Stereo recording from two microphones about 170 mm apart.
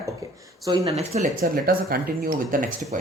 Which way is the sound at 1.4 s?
60° right (ahead or behind).